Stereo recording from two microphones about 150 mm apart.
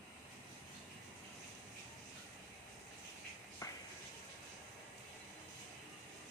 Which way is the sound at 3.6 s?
20° left (ahead or behind).